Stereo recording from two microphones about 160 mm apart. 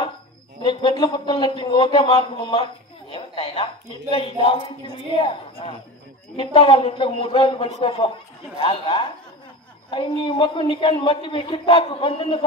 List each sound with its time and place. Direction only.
0.6 s speech: 30° left (ahead or behind)